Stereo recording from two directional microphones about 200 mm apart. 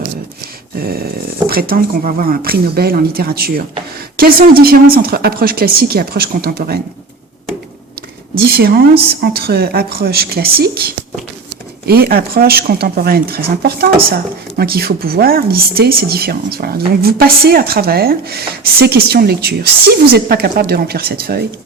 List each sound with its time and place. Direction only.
0.8 s speech: 50° right (ahead or behind)
8.4 s speech: 50° right (ahead or behind)